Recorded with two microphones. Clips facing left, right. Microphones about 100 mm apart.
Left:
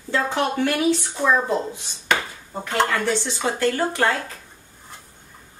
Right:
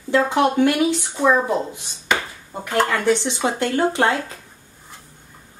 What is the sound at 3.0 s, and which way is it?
Speech, 20° right (ahead or behind).